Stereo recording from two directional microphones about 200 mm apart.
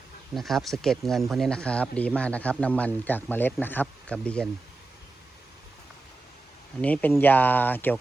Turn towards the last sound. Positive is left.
turn(degrees=10)  # may be behind; listen again after turning